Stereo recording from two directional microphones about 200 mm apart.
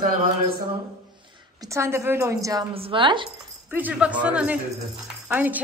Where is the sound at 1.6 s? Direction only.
15° right (ahead or behind).